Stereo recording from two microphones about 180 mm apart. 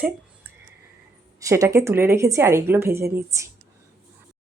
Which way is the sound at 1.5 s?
15° right (ahead or behind).